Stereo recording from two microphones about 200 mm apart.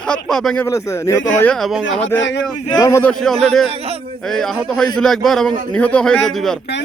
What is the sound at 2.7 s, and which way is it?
Speech, 20° left (ahead or behind).